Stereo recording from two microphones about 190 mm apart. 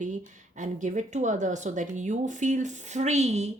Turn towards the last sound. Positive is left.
turn(degrees=-35)  # may be behind; listen again after turning